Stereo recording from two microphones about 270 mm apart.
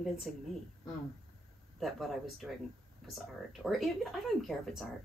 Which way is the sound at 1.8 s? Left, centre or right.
Centre.